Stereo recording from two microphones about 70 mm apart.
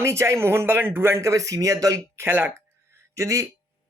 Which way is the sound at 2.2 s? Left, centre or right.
Right.